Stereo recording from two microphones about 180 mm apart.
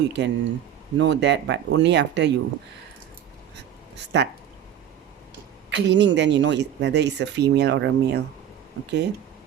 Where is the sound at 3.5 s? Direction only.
70° right (ahead or behind).